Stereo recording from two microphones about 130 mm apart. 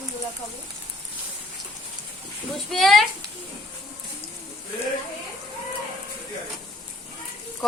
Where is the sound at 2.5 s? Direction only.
Centre (ahead or behind).